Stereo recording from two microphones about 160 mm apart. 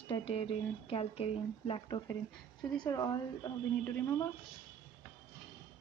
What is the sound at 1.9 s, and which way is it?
Speech, 25° left (ahead or behind).